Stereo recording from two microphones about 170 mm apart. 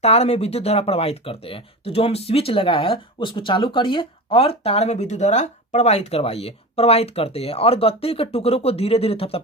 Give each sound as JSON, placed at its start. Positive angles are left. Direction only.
{"t": 0.0, "sound": "speech", "side_deg": 40}